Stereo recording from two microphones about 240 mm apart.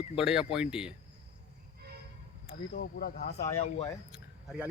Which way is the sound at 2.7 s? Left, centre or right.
Left.